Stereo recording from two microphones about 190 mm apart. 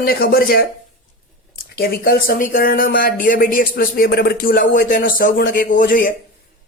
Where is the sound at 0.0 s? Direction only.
50° left (ahead or behind).